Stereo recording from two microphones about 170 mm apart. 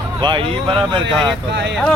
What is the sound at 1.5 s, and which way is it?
Speech, 90° right.